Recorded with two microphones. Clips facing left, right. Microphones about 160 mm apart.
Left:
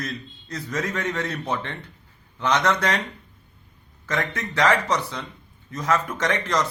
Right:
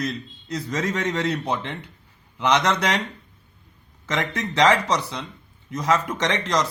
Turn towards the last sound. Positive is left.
turn(degrees=-20)  # may be behind; listen again after turning